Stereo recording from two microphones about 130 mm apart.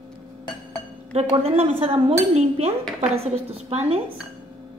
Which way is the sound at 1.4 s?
50° right (ahead or behind).